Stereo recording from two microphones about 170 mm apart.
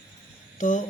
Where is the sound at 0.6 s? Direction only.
45° left (ahead or behind).